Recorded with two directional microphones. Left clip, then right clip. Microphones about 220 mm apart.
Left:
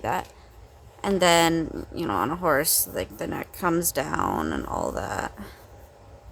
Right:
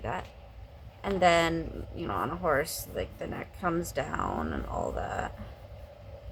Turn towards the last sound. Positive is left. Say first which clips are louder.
# left 4 dB
turn(degrees=55)  # may be behind; listen again after turning